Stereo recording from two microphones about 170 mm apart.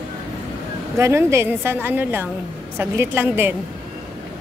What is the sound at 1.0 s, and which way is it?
A woman's voice, 15° right (ahead or behind).